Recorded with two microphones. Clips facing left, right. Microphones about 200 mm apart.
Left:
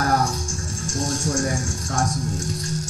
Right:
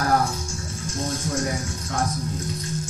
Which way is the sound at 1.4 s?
45° left (ahead or behind).